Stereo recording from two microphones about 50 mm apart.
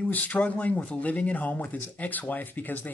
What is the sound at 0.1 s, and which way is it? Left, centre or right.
Speech, left.